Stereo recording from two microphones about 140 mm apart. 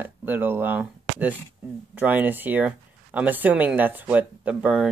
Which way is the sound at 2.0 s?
10° right (ahead or behind).